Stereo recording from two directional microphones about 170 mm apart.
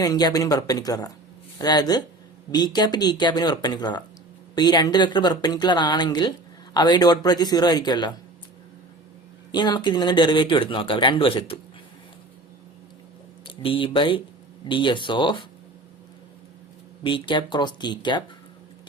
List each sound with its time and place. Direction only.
0.0 s speech: 20° left (ahead or behind)
9.5 s speech: 25° left (ahead or behind)
13.4 s speech: 30° left (ahead or behind)
17.0 s speech: 30° left (ahead or behind)